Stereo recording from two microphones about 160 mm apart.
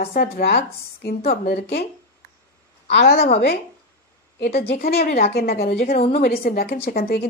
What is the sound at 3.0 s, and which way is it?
Speech, 75° left (ahead or behind).